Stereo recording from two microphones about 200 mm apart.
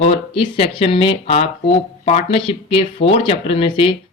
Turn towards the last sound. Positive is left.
turn(degrees=25)  # may be behind; listen again after turning